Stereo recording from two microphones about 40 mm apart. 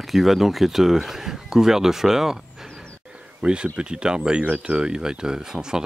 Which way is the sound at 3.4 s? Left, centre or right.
Right.